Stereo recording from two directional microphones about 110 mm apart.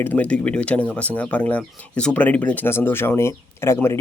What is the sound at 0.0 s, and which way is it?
Speech, 15° left (ahead or behind).